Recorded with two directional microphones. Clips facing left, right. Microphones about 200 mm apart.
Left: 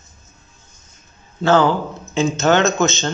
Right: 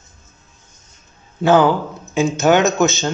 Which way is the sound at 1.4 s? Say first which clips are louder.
Right 2 dB; 15° right (ahead or behind).